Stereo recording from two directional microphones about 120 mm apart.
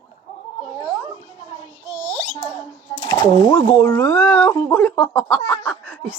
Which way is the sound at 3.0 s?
35° left (ahead or behind).